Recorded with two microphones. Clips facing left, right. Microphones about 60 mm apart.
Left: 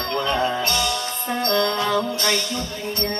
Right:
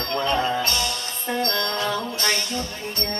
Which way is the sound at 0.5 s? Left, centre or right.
Left.